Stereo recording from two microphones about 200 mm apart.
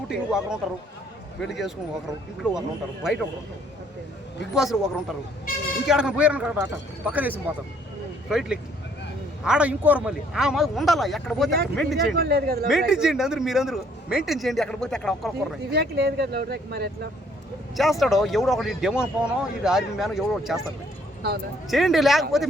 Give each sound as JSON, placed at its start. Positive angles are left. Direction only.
{"t": 0.1, "sound": "speech", "side_deg": 0}
{"t": 4.5, "sound": "speech", "side_deg": 0}
{"t": 12.1, "sound": "speech", "side_deg": -50}
{"t": 12.9, "sound": "speech", "side_deg": -5}
{"t": 15.7, "sound": "speech", "side_deg": -55}
{"t": 17.7, "sound": "speech", "side_deg": 0}
{"t": 21.7, "sound": "speech", "side_deg": 0}